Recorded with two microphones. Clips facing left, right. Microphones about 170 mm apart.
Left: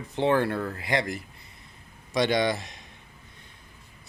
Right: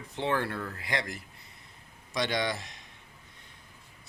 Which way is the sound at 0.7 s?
15° left (ahead or behind).